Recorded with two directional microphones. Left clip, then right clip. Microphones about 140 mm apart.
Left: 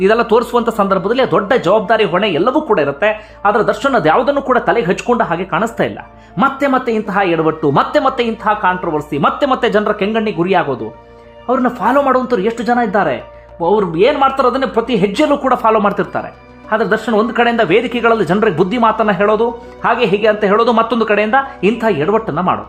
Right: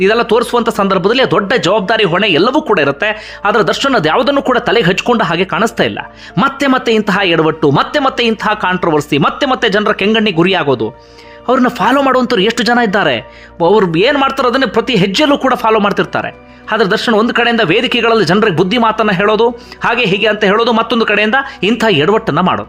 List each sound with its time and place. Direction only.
0.0 s speech: 5° right (ahead or behind); by 5.5 s 30° right (ahead or behind)
5.5 s speech: 15° right (ahead or behind)
6.3 s speech: 30° right (ahead or behind)
8.6 s speech: 30° right (ahead or behind)
9.4 s speech: 10° right (ahead or behind)
20.0 s speech: 10° right (ahead or behind); by 22.5 s 25° right (ahead or behind)